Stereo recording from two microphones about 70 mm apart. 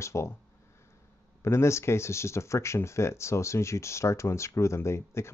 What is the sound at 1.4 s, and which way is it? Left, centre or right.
Speech, left.